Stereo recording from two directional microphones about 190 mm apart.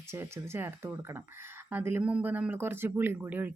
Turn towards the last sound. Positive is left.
turn(degrees=-10)  # may be behind; listen again after turning